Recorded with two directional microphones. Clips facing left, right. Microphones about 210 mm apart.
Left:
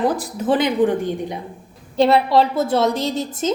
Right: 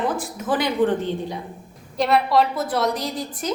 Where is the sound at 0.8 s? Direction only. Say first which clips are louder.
Left 2 dB; 15° left (ahead or behind).